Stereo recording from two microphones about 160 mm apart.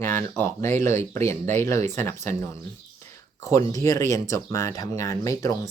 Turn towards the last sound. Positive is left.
turn(degrees=20)  # may be behind; listen again after turning